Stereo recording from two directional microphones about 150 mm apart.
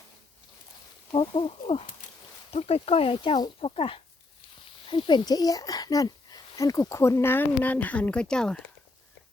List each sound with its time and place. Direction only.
1.1 s a child's voice: 35° left (ahead or behind); by 8.7 s 5° left (ahead or behind)